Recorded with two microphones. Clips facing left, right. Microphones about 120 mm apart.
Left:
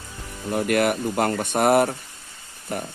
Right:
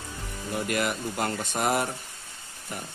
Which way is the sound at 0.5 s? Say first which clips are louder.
Left 7 dB; 55° left (ahead or behind).